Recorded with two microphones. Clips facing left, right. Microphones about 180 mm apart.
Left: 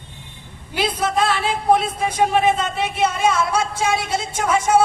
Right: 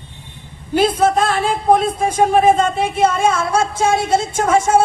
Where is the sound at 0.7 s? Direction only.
45° right (ahead or behind).